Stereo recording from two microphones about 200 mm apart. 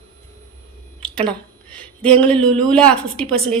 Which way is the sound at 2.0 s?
5° left (ahead or behind).